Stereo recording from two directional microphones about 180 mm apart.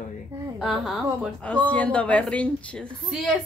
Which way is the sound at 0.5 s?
Centre (ahead or behind).